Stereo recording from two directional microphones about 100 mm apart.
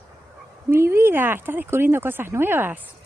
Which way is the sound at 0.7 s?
25° right (ahead or behind).